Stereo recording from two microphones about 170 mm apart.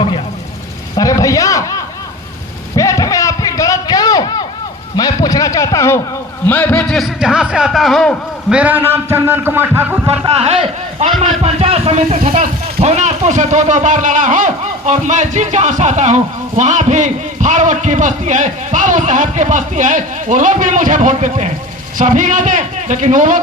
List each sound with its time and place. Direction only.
0.9 s a sound: 20° left (ahead or behind)
6.4 s speech: 10° left (ahead or behind)
8.5 s a man's voice: 10° right (ahead or behind)
10.3 s speech: 35° right (ahead or behind)